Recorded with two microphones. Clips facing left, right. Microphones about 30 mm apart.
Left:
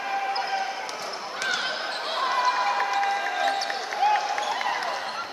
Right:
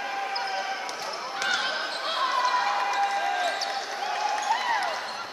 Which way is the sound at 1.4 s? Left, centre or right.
Centre.